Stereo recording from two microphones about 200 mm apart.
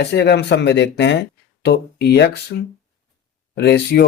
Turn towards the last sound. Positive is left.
turn(degrees=55)  # may be behind; listen again after turning